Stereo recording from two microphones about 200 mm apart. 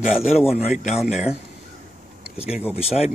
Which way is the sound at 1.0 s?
5° right (ahead or behind).